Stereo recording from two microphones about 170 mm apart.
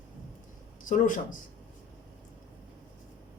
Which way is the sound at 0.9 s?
50° left (ahead or behind).